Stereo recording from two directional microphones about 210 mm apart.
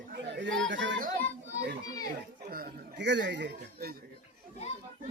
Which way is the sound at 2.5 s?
45° right (ahead or behind).